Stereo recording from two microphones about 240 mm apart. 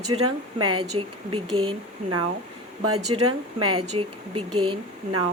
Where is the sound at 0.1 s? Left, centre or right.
Right.